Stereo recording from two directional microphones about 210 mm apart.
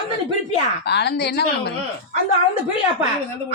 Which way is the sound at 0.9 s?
50° left (ahead or behind).